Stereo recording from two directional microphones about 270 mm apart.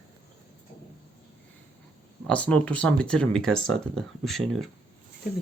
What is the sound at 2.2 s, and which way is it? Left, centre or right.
Speech, centre.